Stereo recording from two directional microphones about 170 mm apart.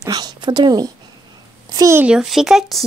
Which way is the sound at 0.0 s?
25° right (ahead or behind).